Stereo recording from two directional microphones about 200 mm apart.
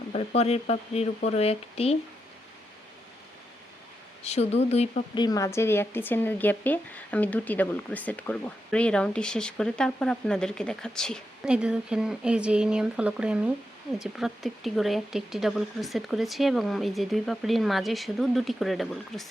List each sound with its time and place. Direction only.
0.1 s speech: 30° left (ahead or behind)
4.2 s speech: 30° left (ahead or behind)
5.2 s speech: 15° left (ahead or behind); by 19.3 s centre (ahead or behind)